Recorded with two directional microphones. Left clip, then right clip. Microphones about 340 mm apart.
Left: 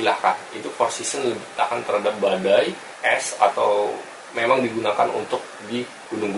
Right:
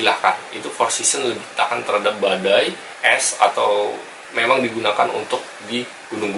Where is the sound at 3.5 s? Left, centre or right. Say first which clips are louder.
Right 2 dB; centre.